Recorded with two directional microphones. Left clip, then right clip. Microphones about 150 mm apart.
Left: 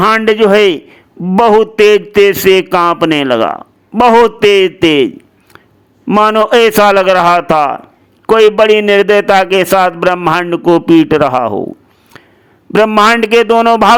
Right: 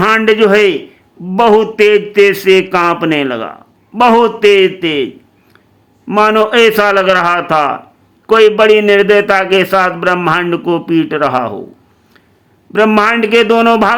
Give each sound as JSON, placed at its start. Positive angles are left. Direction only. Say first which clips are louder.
{"t": 0.0, "sound": "a man's voice", "louder": "left 1 dB", "side_deg": 40}
{"t": 12.7, "sound": "a man's voice", "louder": "left 2 dB", "side_deg": 45}